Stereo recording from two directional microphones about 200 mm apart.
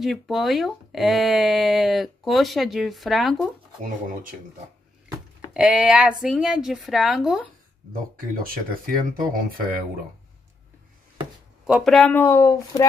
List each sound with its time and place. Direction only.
0.0 s speech: centre (ahead or behind)
3.8 s speech: 40° right (ahead or behind)
5.5 s speech: 5° right (ahead or behind)
7.9 s speech: 45° right (ahead or behind)
11.6 s speech: centre (ahead or behind); by 12.8 s 15° left (ahead or behind)